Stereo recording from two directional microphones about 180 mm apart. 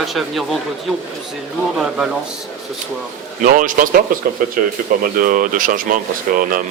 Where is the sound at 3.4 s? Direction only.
50° right (ahead or behind).